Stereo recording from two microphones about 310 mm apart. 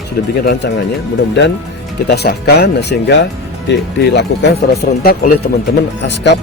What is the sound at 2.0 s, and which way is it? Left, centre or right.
A man's voice, left.